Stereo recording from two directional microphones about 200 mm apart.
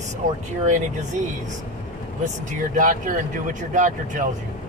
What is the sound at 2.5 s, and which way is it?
Speech, 40° right (ahead or behind).